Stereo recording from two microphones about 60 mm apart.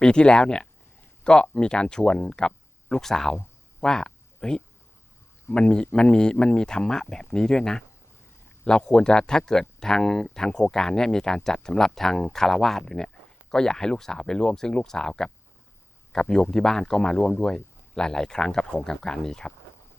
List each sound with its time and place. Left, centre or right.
0.0 s speech: centre
3.8 s a sound: centre
5.5 s speech: centre
16.3 s speech: centre